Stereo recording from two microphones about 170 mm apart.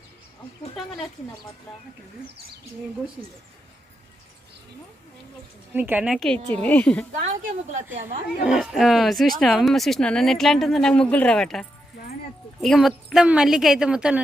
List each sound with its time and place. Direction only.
5.7 s a woman's voice: 10° right (ahead or behind)
6.1 s a woman's voice: 5° left (ahead or behind)
7.2 s speech: 45° right (ahead or behind)
8.4 s speech: 5° right (ahead or behind)
12.6 s speech: centre (ahead or behind)